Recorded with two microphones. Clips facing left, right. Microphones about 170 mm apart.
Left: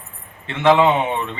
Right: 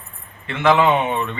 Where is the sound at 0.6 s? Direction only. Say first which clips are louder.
Left 2 dB; 25° left (ahead or behind).